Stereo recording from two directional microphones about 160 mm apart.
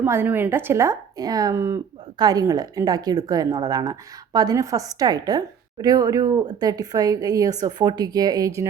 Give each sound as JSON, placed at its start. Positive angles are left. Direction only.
{"t": 0.0, "sound": "a woman's voice", "side_deg": -15}